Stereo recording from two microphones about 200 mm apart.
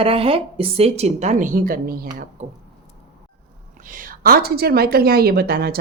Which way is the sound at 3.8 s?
45° right (ahead or behind).